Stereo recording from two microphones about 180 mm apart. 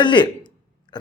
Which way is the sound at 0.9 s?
25° left (ahead or behind).